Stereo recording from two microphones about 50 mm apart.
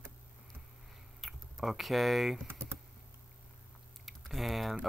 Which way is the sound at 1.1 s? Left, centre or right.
Centre.